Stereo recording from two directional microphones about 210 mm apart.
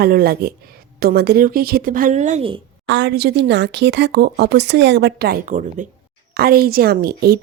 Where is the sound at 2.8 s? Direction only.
55° right (ahead or behind).